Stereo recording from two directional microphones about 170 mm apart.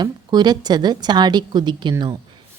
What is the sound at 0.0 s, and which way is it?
A woman's voice, 25° right (ahead or behind).